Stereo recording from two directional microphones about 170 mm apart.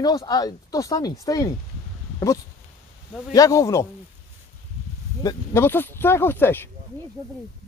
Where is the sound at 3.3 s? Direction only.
20° left (ahead or behind).